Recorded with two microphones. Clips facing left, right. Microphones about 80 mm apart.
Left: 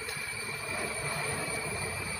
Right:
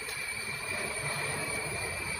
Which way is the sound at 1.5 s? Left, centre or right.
Centre.